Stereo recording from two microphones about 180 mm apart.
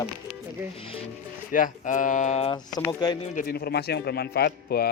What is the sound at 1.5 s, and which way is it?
Speech, 45° left (ahead or behind).